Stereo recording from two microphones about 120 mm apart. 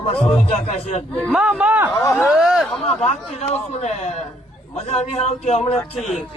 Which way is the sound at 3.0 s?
60° left (ahead or behind).